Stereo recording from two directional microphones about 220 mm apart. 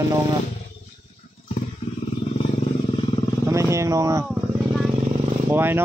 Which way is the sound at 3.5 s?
15° right (ahead or behind).